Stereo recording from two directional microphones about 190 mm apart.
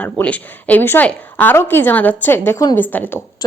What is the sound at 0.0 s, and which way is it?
A woman's voice, 5° left (ahead or behind).